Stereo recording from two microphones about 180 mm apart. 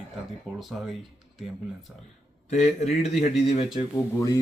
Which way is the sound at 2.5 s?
40° left (ahead or behind).